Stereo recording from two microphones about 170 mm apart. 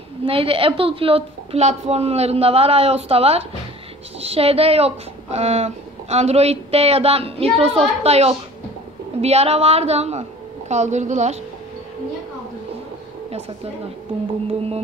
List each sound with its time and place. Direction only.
0.2 s a woman's voice: 35° right (ahead or behind)